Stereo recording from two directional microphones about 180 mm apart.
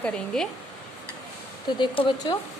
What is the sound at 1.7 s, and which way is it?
Speech, 25° left (ahead or behind).